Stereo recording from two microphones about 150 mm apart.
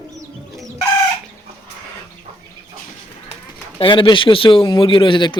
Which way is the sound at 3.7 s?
35° left (ahead or behind).